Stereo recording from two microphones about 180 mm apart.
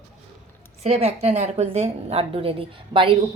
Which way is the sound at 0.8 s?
35° right (ahead or behind).